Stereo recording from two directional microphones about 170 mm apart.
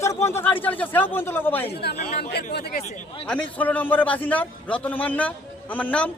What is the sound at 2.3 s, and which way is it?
Speech, 70° left (ahead or behind).